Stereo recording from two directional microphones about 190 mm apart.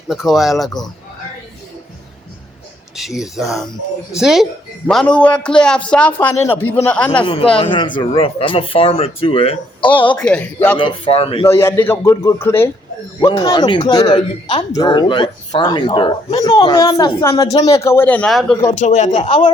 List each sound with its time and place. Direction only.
0.1 s speech: centre (ahead or behind)
2.9 s a woman's voice: centre (ahead or behind)
7.3 s speech: 30° left (ahead or behind)
10.2 s a woman's voice: 5° left (ahead or behind)
10.8 s speech: 25° left (ahead or behind)
11.4 s a woman's voice: 15° left (ahead or behind)
13.2 s speech: 30° left (ahead or behind); by 18.5 s centre (ahead or behind)
18.8 s speech: 40° left (ahead or behind)